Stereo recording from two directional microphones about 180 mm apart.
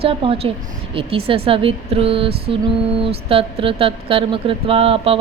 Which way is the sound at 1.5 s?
30° right (ahead or behind).